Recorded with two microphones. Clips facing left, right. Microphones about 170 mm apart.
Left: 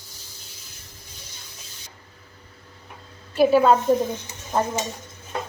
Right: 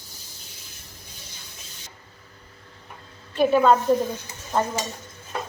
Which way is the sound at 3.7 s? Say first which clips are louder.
Left 1 dB; 20° left (ahead or behind).